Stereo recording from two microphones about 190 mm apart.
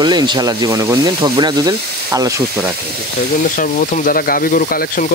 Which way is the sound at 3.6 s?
50° left (ahead or behind).